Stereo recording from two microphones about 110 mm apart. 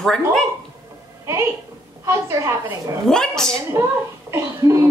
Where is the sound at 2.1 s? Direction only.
30° right (ahead or behind).